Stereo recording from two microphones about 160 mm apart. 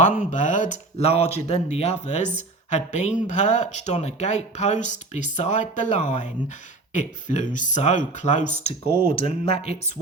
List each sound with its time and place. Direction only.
0.2 s speech: 50° left (ahead or behind)
9.0 s speech: 35° left (ahead or behind)